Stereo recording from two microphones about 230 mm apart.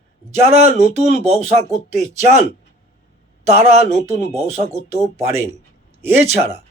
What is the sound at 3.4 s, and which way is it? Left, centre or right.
Speech, right.